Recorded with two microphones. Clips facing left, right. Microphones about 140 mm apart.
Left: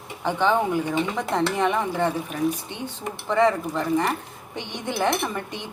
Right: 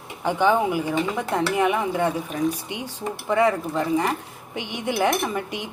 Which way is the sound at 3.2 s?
10° right (ahead or behind).